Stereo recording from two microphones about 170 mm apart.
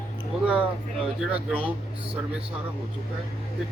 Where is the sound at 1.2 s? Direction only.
5° right (ahead or behind).